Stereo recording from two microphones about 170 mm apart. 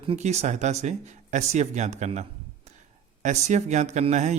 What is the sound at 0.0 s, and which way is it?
Speech, 35° right (ahead or behind).